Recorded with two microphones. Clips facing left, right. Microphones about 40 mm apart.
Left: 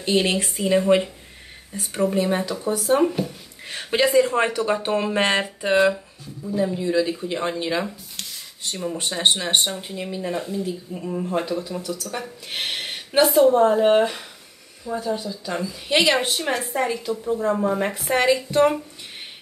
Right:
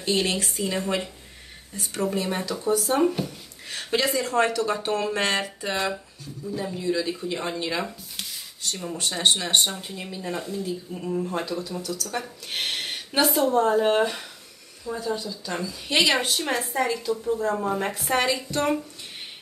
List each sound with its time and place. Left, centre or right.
0.0 s speech: left
2.5 s speech: centre
3.6 s speech: left
6.4 s speech: centre
8.9 s speech: left
12.1 s speech: centre
13.2 s speech: centre; by 17.6 s left
17.6 s speech: centre